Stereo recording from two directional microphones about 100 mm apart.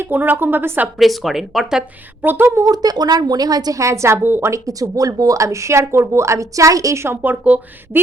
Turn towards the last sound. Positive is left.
turn(degrees=-15)  # may be behind; listen again after turning